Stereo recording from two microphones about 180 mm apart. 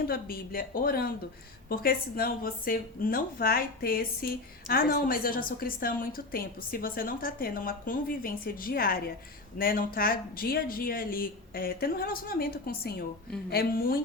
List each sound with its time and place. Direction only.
0.1 s a woman's voice: 55° left (ahead or behind)